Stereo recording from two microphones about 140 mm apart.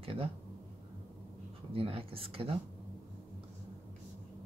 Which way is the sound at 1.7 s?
40° right (ahead or behind).